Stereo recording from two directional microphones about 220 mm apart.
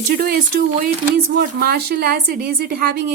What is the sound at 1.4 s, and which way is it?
Speech, 45° right (ahead or behind).